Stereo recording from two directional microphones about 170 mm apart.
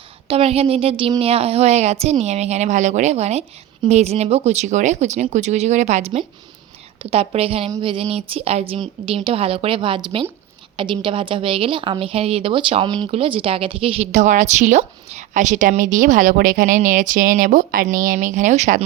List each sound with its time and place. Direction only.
0.3 s a woman's voice: 35° right (ahead or behind)